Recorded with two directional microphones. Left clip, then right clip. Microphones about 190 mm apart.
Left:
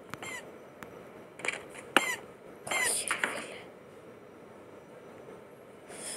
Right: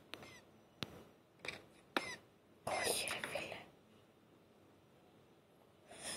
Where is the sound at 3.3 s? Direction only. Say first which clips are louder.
Left 7 dB; 35° left (ahead or behind).